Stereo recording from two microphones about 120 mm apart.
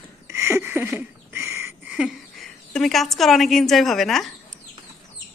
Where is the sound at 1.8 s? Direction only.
10° right (ahead or behind).